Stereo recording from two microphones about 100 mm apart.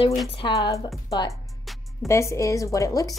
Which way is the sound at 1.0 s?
40° left (ahead or behind).